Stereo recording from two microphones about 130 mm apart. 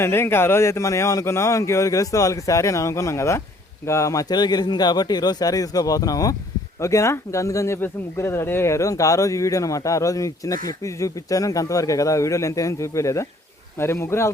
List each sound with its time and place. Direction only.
0.0 s speech: 20° left (ahead or behind)